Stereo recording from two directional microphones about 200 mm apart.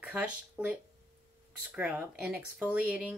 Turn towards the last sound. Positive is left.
turn(degrees=-5)  # may be behind; listen again after turning